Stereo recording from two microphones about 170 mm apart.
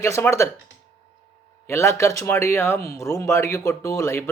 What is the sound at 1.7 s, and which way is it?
A man's voice, 15° left (ahead or behind).